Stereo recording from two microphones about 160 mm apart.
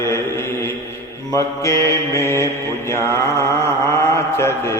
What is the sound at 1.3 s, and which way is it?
Mantra, 20° left (ahead or behind).